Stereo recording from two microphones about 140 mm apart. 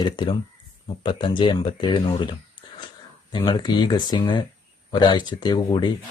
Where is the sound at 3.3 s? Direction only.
30° left (ahead or behind).